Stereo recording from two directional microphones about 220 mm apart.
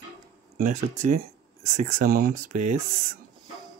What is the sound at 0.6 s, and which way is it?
Speech, 35° right (ahead or behind).